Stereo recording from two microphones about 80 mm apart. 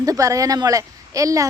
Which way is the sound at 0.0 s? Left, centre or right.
Right.